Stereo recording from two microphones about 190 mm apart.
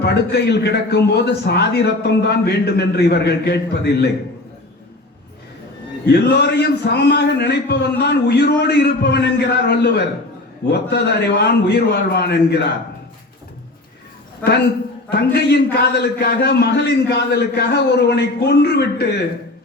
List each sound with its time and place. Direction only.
0.0 s a man's voice: 60° left (ahead or behind)
6.1 s a man's voice: 60° left (ahead or behind)
14.4 s a man's voice: 10° left (ahead or behind)
15.1 s a man's voice: 55° left (ahead or behind)